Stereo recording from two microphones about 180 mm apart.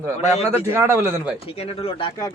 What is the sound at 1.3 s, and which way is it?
Speech, 30° left (ahead or behind).